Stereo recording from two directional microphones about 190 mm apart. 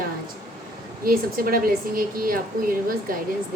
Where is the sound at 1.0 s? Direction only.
50° right (ahead or behind).